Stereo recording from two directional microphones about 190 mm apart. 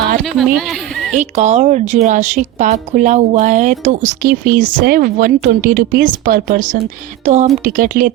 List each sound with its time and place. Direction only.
0.3 s speech: centre (ahead or behind)
1.1 s a woman's voice: 40° right (ahead or behind)